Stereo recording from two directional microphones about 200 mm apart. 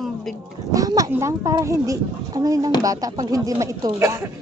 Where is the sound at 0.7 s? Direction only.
15° right (ahead or behind).